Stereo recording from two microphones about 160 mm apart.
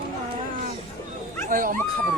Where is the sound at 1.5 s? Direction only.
60° right (ahead or behind).